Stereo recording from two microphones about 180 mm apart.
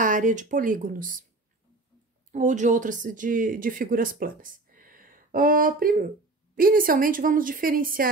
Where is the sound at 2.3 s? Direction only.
45° right (ahead or behind).